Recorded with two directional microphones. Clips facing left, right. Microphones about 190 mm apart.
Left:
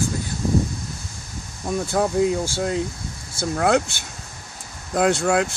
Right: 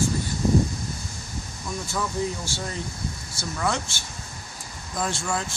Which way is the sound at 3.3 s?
55° left (ahead or behind).